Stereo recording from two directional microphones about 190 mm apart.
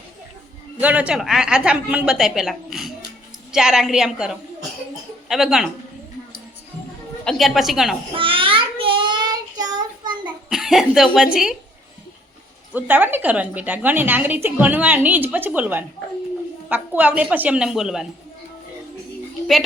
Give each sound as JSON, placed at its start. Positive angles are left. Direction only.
{"t": 0.8, "sound": "a woman's voice", "side_deg": -10}
{"t": 7.3, "sound": "a woman's voice", "side_deg": 0}
{"t": 8.1, "sound": "child singing", "side_deg": -25}
{"t": 10.5, "sound": "a woman's voice", "side_deg": 0}
{"t": 12.7, "sound": "a woman's voice", "side_deg": -10}